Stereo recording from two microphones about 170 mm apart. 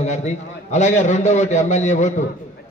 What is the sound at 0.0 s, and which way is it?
A man's voice, 45° left (ahead or behind).